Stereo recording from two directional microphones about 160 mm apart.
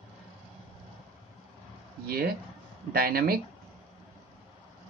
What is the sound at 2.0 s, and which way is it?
Speech, 70° right (ahead or behind).